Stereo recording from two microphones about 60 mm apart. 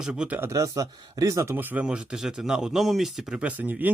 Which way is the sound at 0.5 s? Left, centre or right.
Right.